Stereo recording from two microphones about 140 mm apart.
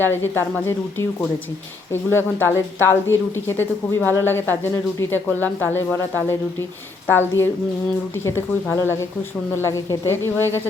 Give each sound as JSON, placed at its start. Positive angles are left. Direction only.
{"t": 0.0, "sound": "speech", "side_deg": 15}